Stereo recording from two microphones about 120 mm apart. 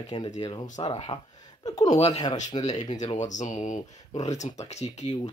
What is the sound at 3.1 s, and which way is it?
Speech, 90° left.